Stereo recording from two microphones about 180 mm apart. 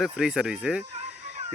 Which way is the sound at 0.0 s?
Centre (ahead or behind).